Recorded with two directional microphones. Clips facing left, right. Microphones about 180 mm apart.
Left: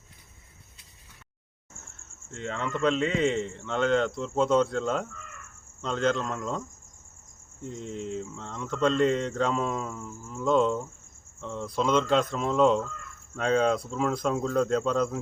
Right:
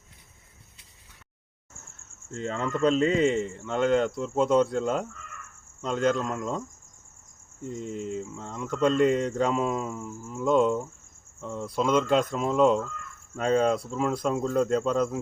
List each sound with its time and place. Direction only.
2.3 s speech: 40° right (ahead or behind)
3.2 s speech: 5° right (ahead or behind)
7.6 s speech: 5° right (ahead or behind)